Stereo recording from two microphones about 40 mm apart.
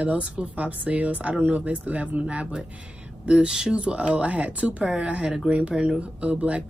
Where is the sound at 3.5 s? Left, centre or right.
Centre.